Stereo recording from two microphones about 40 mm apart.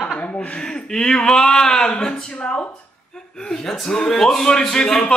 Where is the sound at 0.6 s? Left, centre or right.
Centre.